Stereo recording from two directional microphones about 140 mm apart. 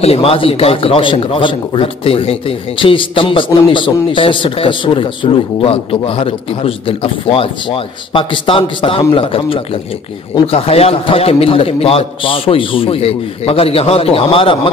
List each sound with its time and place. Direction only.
0.0 s a man's voice: 45° left (ahead or behind)